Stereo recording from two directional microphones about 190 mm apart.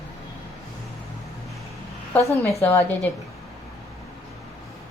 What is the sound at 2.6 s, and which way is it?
Speech, 15° left (ahead or behind).